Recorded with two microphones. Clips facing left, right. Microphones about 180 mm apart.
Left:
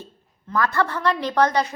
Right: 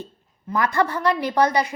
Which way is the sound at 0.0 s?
15° right (ahead or behind).